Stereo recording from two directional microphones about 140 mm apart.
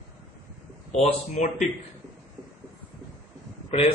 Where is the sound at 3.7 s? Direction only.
50° left (ahead or behind).